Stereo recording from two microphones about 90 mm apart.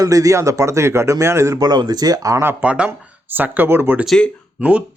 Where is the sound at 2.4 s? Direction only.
25° right (ahead or behind).